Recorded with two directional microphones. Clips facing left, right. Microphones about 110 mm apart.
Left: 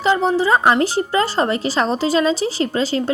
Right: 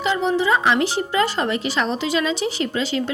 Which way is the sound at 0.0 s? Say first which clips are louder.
Left 3 dB; 35° left (ahead or behind).